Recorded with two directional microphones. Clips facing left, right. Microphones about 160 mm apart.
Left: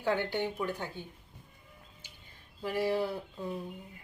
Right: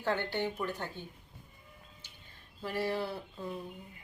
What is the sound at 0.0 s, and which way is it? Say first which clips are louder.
Speech: left 2 dB; 15° left (ahead or behind).